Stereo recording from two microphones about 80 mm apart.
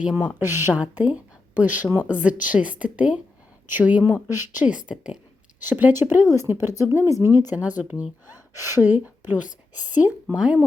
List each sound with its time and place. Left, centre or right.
0.0 s a woman's voice: centre
0.3 s speech: right
0.8 s a woman's voice: centre
4.7 s a woman's voice: centre
5.5 s speech: right
7.5 s a woman's voice: centre
10.3 s a woman's voice: centre